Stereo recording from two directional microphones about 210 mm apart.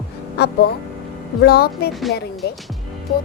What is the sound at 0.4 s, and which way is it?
Music, 50° left (ahead or behind).